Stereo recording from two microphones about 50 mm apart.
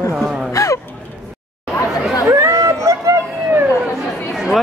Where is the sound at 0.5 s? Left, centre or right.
Left.